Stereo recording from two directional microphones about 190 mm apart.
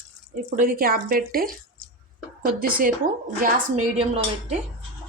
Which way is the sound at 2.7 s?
50° right (ahead or behind).